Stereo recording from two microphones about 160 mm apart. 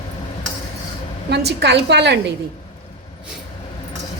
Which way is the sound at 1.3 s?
90° right.